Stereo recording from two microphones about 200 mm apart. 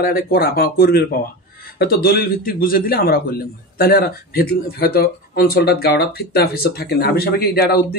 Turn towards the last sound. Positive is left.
turn(degrees=50)  # may be behind; listen again after turning